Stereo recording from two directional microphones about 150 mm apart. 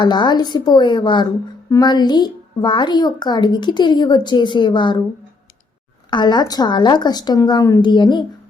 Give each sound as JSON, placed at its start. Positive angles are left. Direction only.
{"t": 0.0, "sound": "a child's voice", "side_deg": 30}
{"t": 6.1, "sound": "a child's voice", "side_deg": 30}